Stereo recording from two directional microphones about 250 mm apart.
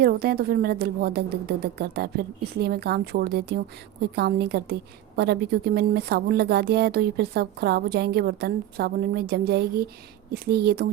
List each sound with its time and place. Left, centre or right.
0.0 s a woman's voice: right